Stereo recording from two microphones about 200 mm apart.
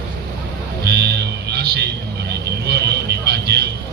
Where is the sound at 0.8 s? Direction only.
55° right (ahead or behind).